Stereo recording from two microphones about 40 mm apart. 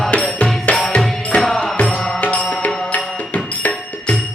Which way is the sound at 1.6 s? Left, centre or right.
Left.